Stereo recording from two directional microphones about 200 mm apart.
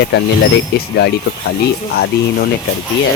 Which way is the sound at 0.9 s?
55° left (ahead or behind).